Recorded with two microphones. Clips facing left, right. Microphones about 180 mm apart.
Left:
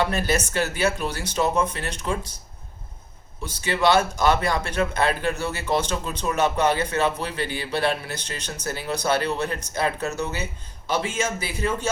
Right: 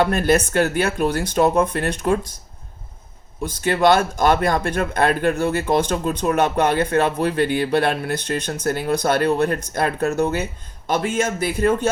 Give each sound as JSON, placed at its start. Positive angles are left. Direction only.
{"t": 0.0, "sound": "speech", "side_deg": -55}
{"t": 3.4, "sound": "speech", "side_deg": -50}